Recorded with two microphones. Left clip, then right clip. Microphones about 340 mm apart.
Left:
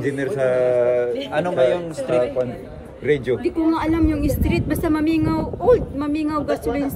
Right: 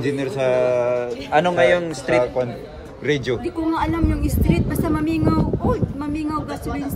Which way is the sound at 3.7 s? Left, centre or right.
Centre.